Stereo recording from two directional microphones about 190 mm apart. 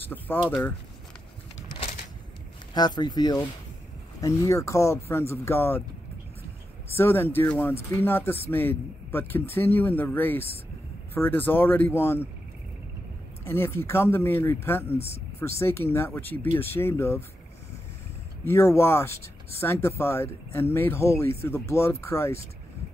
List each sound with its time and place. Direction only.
0.0 s speech: 10° left (ahead or behind)
2.7 s speech: 20° left (ahead or behind)
6.9 s speech: 10° left (ahead or behind)
13.5 s speech: 15° left (ahead or behind)
18.4 s speech: 15° left (ahead or behind)